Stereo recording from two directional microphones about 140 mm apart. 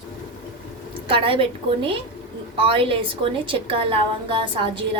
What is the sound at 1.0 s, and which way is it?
Speech, 40° right (ahead or behind).